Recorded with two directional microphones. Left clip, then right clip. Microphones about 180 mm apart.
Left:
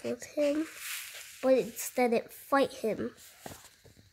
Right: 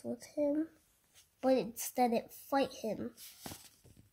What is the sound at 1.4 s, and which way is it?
Speech, 10° left (ahead or behind).